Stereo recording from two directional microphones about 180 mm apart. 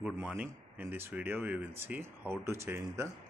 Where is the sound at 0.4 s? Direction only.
10° right (ahead or behind).